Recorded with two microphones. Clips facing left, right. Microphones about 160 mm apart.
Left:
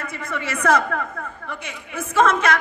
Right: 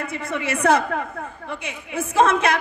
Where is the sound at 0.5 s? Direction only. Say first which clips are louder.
Right 1 dB; 25° right (ahead or behind).